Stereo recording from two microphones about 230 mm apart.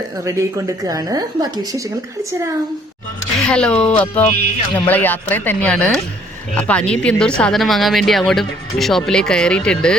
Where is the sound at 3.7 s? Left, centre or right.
Left.